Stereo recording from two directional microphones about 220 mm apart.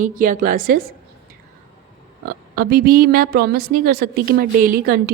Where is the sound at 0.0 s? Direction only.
35° right (ahead or behind).